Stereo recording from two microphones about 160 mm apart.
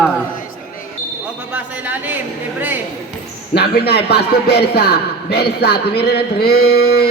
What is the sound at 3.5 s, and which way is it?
A man's voice, 90° left.